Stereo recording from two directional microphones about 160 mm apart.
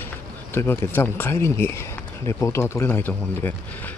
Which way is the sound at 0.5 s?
15° left (ahead or behind).